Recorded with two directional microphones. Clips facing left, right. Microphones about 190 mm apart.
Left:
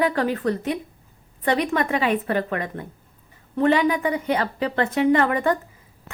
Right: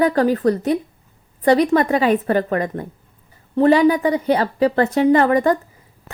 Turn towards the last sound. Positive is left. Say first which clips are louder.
# right 5 dB
turn(degrees=-35)  # may be behind; listen again after turning